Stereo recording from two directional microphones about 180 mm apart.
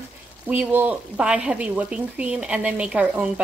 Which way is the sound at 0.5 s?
10° right (ahead or behind).